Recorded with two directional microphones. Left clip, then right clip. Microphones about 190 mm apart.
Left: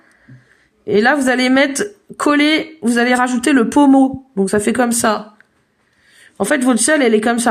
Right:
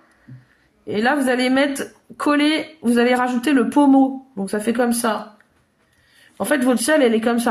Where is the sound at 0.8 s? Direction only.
45° left (ahead or behind).